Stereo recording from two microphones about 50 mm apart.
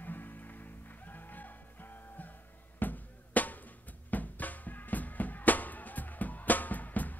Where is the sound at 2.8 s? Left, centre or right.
Left.